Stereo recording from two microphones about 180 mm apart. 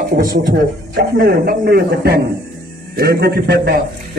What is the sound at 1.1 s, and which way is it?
A man's voice, 60° right (ahead or behind).